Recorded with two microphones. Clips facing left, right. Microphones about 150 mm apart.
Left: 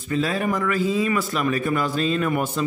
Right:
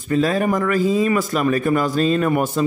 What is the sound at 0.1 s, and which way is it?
A man's voice, 45° right (ahead or behind).